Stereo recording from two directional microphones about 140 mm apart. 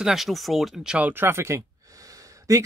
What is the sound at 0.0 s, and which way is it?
Speech, centre (ahead or behind).